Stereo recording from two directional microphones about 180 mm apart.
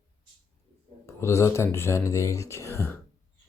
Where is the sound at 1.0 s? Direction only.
15° left (ahead or behind).